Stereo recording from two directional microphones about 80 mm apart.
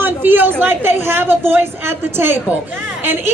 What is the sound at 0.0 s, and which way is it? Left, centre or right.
A woman's voice, right.